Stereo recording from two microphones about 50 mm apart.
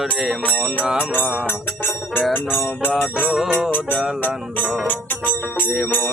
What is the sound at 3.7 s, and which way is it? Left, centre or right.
Music, left.